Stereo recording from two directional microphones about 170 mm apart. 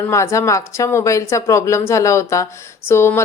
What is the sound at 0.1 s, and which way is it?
Speech, 15° left (ahead or behind).